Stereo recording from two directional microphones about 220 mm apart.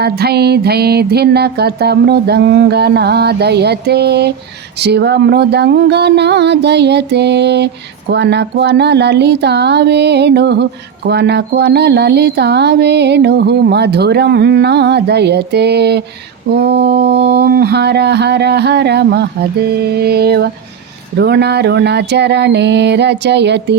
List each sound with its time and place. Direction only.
0.0 s speech: 45° right (ahead or behind)